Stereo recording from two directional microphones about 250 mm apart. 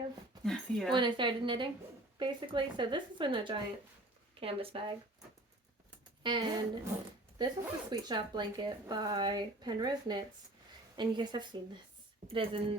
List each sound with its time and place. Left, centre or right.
0.4 s speech: centre
0.9 s a woman's voice: centre
6.2 s a woman's voice: centre